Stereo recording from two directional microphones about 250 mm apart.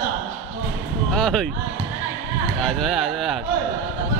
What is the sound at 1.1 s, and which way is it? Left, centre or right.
Speech, centre.